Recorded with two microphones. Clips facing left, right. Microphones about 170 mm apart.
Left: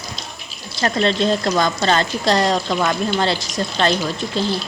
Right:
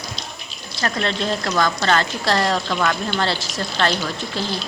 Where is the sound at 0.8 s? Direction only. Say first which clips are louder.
Left 5 dB; 25° left (ahead or behind).